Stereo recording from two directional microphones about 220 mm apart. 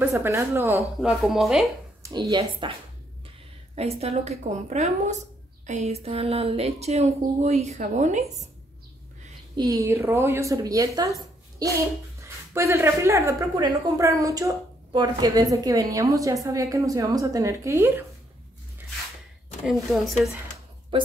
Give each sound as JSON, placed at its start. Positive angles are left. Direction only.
{"t": 0.0, "sound": "speech", "side_deg": -10}
{"t": 2.0, "sound": "speech", "side_deg": -15}
{"t": 3.7, "sound": "speech", "side_deg": -30}
{"t": 9.6, "sound": "speech", "side_deg": -15}
{"t": 19.6, "sound": "speech", "side_deg": 0}